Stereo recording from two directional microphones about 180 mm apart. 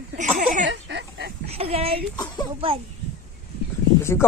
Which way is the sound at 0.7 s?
75° right (ahead or behind).